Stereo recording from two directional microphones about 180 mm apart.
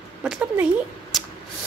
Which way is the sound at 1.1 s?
Centre (ahead or behind).